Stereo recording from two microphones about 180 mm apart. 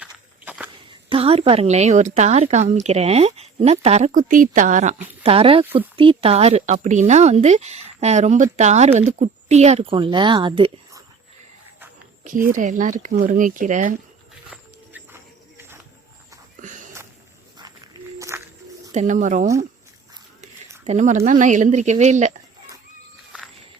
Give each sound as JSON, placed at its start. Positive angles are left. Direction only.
{"t": 0.0, "sound": "walk", "side_deg": -5}
{"t": 1.1, "sound": "speech", "side_deg": -35}
{"t": 5.2, "sound": "speech", "side_deg": -30}
{"t": 12.5, "sound": "speech", "side_deg": -45}
{"t": 14.5, "sound": "walk", "side_deg": -10}
{"t": 16.6, "sound": "a sound", "side_deg": -45}
{"t": 18.2, "sound": "a sound", "side_deg": -15}
{"t": 18.9, "sound": "speech", "side_deg": -45}
{"t": 20.8, "sound": "speech", "side_deg": -40}